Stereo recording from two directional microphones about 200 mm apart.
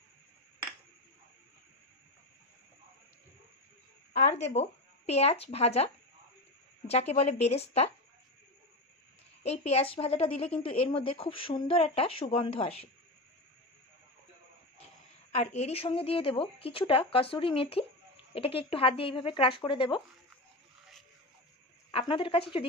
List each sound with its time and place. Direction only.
4.1 s speech: 35° left (ahead or behind)
6.9 s a woman's voice: 30° left (ahead or behind)
9.4 s a woman's voice: 30° left (ahead or behind)
15.3 s a woman's voice: 30° left (ahead or behind)
21.9 s a woman's voice: 25° left (ahead or behind)